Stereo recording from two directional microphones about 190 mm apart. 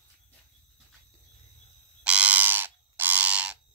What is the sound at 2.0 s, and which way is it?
Bird, 5° right (ahead or behind).